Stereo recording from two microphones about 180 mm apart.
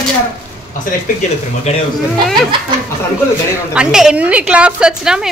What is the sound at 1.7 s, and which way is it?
Speech, 35° left (ahead or behind).